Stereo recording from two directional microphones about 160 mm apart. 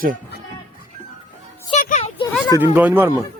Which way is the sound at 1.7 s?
50° left (ahead or behind).